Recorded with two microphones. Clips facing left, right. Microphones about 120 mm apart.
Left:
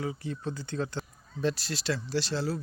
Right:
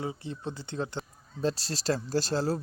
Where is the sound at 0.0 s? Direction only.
25° right (ahead or behind).